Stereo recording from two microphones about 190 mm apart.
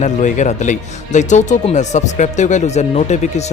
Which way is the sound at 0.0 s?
40° left (ahead or behind).